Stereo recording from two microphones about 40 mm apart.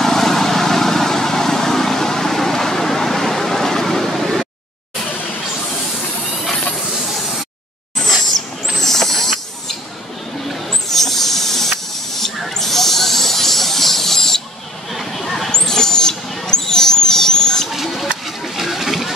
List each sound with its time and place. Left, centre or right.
0.0 s vehicle: centre
8.8 s mechanisms: centre
10.5 s hiss: centre
14.9 s a sound: centre
15.5 s a sound: centre
17.6 s rodents: centre
18.2 s pig: centre